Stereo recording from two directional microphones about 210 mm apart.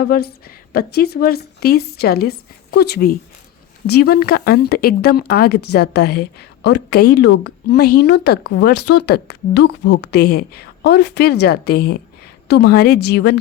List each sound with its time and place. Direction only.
0.0 s speech: 50° left (ahead or behind)